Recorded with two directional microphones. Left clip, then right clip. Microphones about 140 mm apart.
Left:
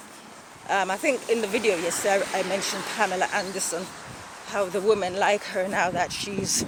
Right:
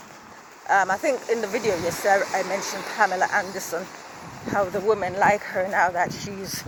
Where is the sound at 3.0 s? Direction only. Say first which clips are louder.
Right 4 dB; 35° left (ahead or behind).